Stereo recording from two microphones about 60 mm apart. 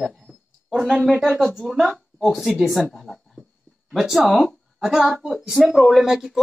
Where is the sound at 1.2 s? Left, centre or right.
Centre.